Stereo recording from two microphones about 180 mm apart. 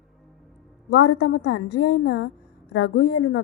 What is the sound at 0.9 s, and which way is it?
A woman's voice, 70° left (ahead or behind).